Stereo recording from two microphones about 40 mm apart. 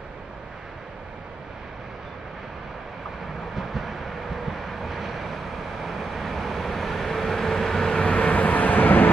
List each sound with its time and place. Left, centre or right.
3.5 s vehicle: centre
8.0 s vehicle: left